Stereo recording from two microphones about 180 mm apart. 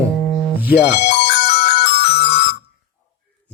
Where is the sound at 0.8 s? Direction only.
70° left (ahead or behind).